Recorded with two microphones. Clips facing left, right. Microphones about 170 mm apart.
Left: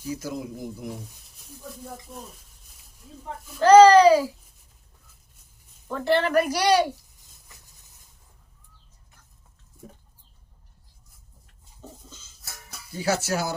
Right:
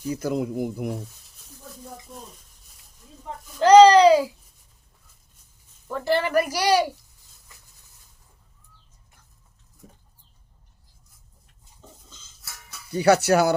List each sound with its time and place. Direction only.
0.1 s speech: 60° right (ahead or behind)
3.6 s speech: 20° right (ahead or behind)
5.9 s a woman's voice: 5° right (ahead or behind)
12.9 s speech: 65° right (ahead or behind)